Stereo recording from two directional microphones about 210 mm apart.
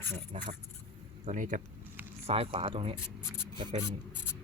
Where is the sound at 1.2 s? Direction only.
35° right (ahead or behind).